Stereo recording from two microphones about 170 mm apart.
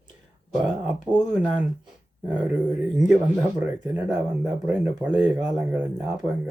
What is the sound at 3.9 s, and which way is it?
Speech, 10° right (ahead or behind).